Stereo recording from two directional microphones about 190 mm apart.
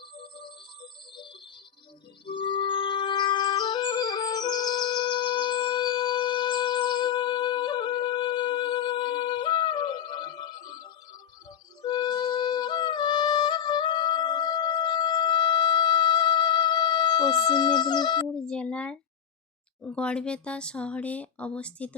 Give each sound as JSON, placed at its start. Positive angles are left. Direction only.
{"t": 0.2, "sound": "music", "side_deg": 25}
{"t": 18.3, "sound": "speech", "side_deg": 5}